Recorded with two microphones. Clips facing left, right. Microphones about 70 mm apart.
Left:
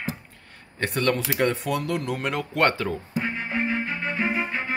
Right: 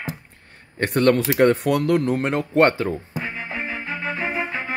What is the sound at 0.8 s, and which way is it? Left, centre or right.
Speech, right.